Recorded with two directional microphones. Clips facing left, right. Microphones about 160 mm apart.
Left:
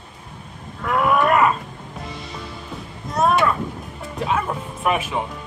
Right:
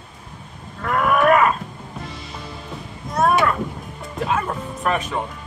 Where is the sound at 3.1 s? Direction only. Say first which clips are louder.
Even; centre (ahead or behind).